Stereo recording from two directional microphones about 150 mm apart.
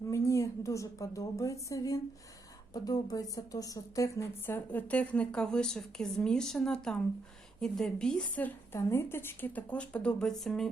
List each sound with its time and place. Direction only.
0.1 s a woman's voice: 20° left (ahead or behind); by 10.7 s centre (ahead or behind)